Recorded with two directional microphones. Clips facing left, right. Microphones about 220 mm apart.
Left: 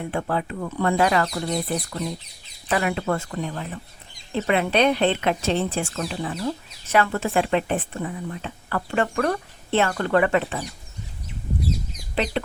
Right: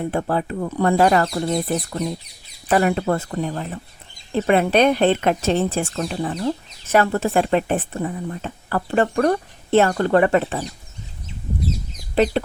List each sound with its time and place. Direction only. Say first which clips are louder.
0.0 s speech: right 4 dB; 40° right (ahead or behind)
1.2 s speech: right 4 dB; 30° right (ahead or behind)
1.6 s speech: right 4 dB; 45° right (ahead or behind)
12.1 s speech: right 7 dB; 40° right (ahead or behind)